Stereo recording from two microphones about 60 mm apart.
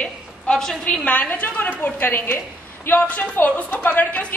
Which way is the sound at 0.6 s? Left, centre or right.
Centre.